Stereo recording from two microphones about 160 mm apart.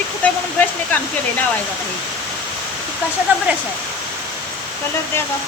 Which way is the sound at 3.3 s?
10° right (ahead or behind).